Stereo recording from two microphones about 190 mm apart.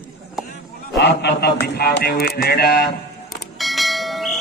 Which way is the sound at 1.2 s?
60° left (ahead or behind).